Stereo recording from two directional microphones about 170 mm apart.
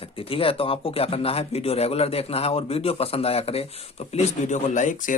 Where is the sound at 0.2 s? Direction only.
35° left (ahead or behind).